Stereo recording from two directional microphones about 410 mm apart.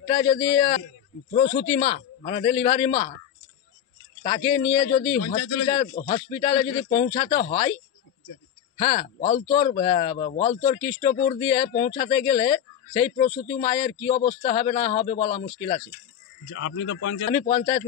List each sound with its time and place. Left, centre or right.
0.0 s a man's voice: centre
4.2 s a man's voice: centre
8.7 s a man's voice: centre
16.5 s a man's voice: left
17.3 s a man's voice: centre